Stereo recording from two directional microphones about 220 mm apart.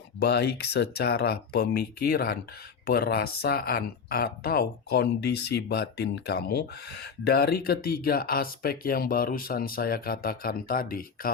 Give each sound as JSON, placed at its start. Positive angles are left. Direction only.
{"t": 0.2, "sound": "speech", "side_deg": 50}